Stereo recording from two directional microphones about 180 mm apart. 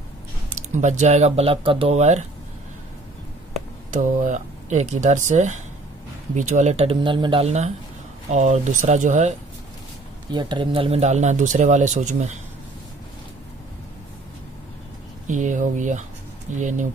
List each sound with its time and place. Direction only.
0.5 s speech: 40° right (ahead or behind)
3.9 s speech: 45° right (ahead or behind)
10.3 s speech: 25° right (ahead or behind); by 12.4 s 40° right (ahead or behind)
15.2 s speech: 45° right (ahead or behind)